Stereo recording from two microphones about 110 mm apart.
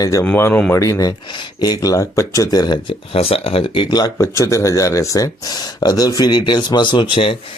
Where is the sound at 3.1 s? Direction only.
60° left (ahead or behind).